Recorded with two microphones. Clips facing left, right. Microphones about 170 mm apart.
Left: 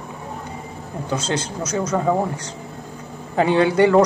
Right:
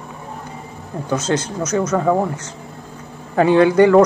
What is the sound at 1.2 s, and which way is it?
Speech, 10° left (ahead or behind).